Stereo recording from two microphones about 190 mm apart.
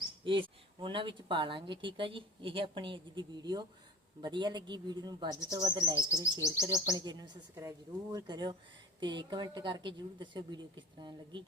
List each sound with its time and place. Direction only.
0.3 s a woman's voice: 25° right (ahead or behind)